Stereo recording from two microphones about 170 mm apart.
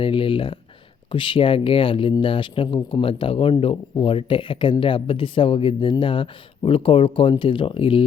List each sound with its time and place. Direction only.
0.0 s speech: 30° left (ahead or behind)